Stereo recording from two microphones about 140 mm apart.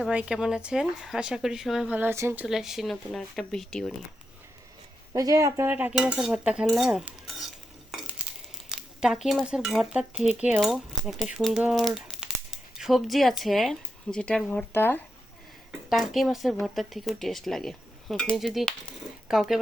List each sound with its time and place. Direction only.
0.1 s speech: 5° right (ahead or behind)
5.1 s cutlery: 25° right (ahead or behind); by 8.3 s 5° right (ahead or behind)
8.7 s speech: 5° right (ahead or behind); by 15.0 s 15° left (ahead or behind)
15.9 s speech: centre (ahead or behind)